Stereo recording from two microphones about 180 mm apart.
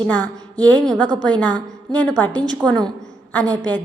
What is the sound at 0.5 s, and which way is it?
Speech, 20° right (ahead or behind).